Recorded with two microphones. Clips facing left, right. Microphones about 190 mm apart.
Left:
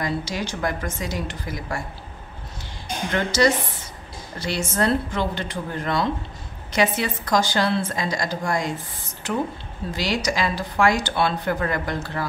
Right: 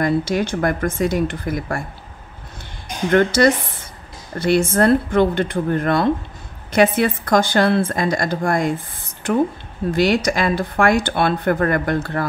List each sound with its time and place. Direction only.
0.0 s speech: 55° right (ahead or behind)
3.1 s a woman's voice: 55° right (ahead or behind)